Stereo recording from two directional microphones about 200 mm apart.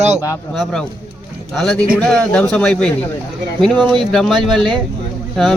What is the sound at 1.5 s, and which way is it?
Speech, 5° left (ahead or behind).